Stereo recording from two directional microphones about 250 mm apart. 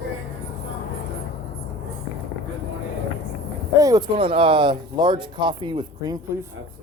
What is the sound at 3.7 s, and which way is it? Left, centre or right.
Speech, centre.